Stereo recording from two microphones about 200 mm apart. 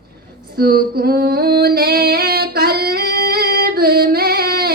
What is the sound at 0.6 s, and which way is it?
Female singing, 50° right (ahead or behind).